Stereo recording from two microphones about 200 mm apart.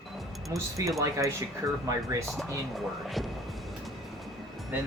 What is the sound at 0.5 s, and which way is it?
Speech, 15° right (ahead or behind).